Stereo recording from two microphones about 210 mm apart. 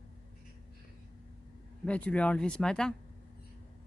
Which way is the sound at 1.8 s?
5° left (ahead or behind).